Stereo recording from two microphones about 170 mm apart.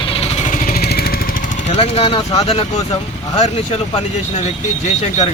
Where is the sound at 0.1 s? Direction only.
35° left (ahead or behind); by 1.2 s 65° left (ahead or behind).